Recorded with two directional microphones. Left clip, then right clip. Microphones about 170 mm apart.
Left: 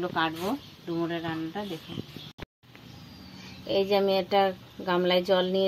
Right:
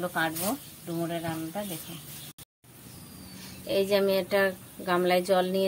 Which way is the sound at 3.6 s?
25° left (ahead or behind).